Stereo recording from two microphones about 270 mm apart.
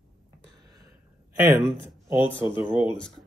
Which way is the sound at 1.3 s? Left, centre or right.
Centre.